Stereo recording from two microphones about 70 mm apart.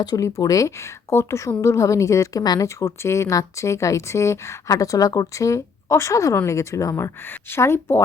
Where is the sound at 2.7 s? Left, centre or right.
Left.